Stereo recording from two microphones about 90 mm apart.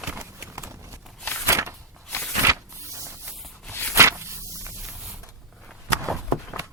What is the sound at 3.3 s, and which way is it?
Walk, centre (ahead or behind).